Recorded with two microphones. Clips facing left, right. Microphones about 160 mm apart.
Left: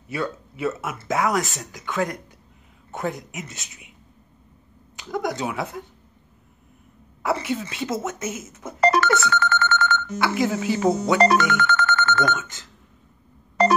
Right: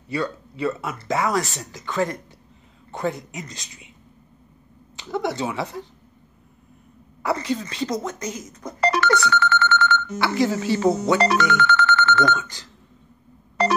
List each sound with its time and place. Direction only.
0.1 s speech: 5° left (ahead or behind)
5.0 s speech: centre (ahead or behind)
7.2 s speech: 5° left (ahead or behind)
8.8 s telephone bell ringing: 45° left (ahead or behind)
9.3 s telephone dialing: 45° left (ahead or behind)
10.1 s speech: centre (ahead or behind)
11.1 s speech: 45° left (ahead or behind)